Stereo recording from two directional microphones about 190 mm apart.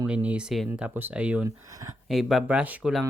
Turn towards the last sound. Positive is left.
turn(degrees=-5)  # may be behind; listen again after turning